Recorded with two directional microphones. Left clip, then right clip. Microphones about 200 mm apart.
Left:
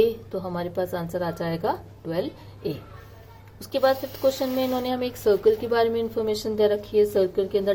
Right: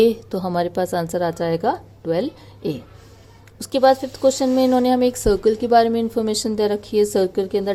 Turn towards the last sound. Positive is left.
turn(degrees=-50)  # may be behind; listen again after turning